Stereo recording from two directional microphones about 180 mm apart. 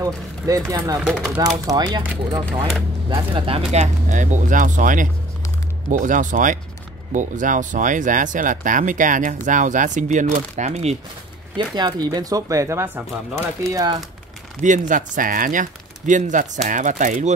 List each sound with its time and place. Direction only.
0.0 s speech: 20° right (ahead or behind)
1.0 s speech: 5° right (ahead or behind)
1.7 s speech: 20° right (ahead or behind)
3.7 s speech: 40° right (ahead or behind)
11.5 s speech: 25° right (ahead or behind)
14.6 s speech: 45° right (ahead or behind)